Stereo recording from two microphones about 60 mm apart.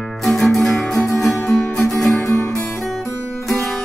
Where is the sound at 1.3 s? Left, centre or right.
Left.